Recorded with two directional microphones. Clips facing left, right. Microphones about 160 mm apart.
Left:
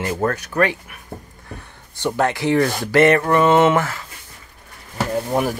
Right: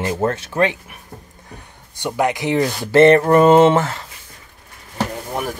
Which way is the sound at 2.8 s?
30° right (ahead or behind).